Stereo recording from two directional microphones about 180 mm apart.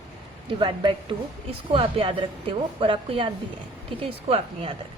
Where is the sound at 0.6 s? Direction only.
25° right (ahead or behind).